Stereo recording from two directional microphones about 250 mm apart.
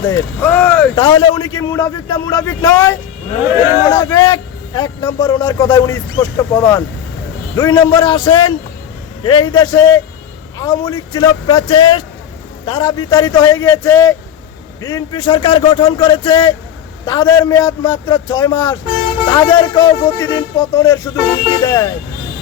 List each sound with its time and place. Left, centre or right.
0.1 s a man's voice: centre
0.9 s a man's voice: centre